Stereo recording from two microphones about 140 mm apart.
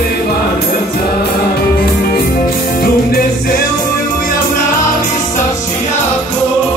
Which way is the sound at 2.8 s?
90° left.